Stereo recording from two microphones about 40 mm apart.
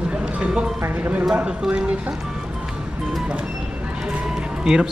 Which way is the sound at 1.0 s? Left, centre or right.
Right.